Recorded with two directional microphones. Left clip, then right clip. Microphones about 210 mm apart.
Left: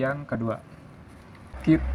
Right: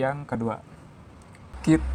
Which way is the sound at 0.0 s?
45° right (ahead or behind).